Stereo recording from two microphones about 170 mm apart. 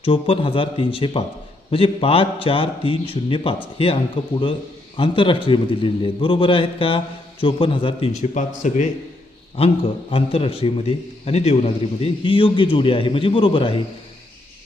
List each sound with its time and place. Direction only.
0.0 s a man's voice: 30° left (ahead or behind)
9.6 s a man's voice: 30° left (ahead or behind)